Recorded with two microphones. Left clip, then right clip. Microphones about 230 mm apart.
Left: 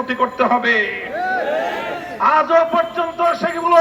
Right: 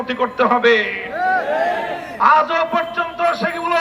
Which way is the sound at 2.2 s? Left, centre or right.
Right.